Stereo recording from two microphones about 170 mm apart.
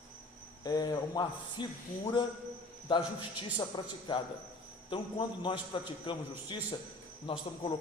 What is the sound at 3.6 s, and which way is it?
A man's voice, 30° left (ahead or behind).